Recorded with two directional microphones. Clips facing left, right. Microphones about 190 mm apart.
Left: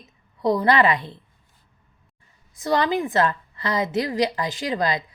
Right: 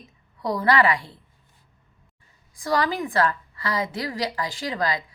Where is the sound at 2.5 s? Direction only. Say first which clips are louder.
Left 3 dB; 20° left (ahead or behind).